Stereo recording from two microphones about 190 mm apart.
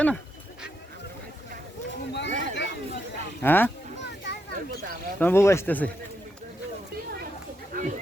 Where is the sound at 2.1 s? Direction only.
65° left (ahead or behind).